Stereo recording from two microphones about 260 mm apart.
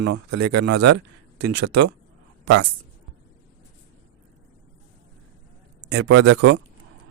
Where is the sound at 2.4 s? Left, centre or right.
Right.